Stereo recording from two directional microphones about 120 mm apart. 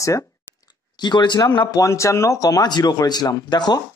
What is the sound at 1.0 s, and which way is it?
Speech, 40° left (ahead or behind).